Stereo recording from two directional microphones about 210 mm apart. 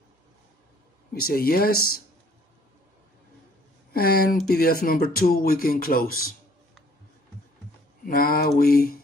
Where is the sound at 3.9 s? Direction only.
45° left (ahead or behind).